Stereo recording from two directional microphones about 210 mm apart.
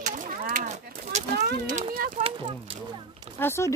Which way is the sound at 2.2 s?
25° right (ahead or behind).